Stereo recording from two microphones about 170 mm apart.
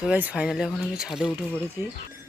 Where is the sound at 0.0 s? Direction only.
10° right (ahead or behind).